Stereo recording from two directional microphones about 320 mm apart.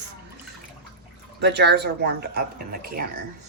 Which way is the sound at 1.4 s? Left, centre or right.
Right.